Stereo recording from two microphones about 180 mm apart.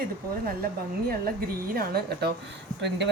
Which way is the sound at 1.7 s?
60° right (ahead or behind).